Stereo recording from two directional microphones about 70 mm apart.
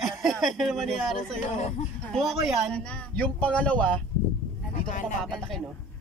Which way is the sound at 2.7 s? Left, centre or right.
Centre.